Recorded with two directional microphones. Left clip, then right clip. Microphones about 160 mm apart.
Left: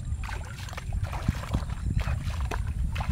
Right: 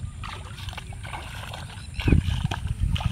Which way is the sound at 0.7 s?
15° left (ahead or behind).